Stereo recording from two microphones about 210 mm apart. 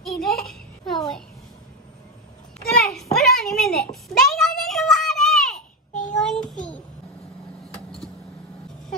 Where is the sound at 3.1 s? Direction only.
Centre (ahead or behind).